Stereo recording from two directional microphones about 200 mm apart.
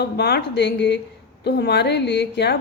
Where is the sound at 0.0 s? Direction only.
55° left (ahead or behind).